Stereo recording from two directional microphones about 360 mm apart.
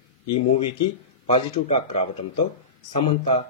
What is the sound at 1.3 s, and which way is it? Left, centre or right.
Speech, centre.